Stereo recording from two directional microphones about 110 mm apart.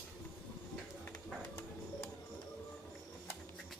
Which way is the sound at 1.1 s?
25° left (ahead or behind).